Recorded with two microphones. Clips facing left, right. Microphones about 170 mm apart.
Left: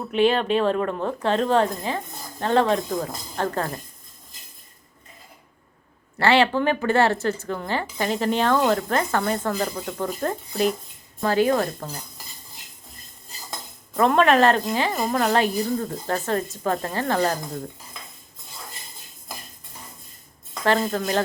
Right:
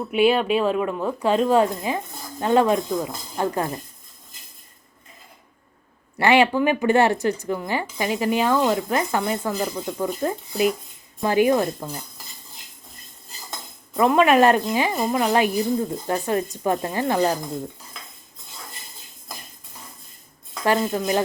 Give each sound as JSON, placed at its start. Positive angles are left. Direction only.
{"t": 0.1, "sound": "speech", "side_deg": -10}
{"t": 6.1, "sound": "speech", "side_deg": -15}
{"t": 13.9, "sound": "speech", "side_deg": -10}
{"t": 20.9, "sound": "speech", "side_deg": -10}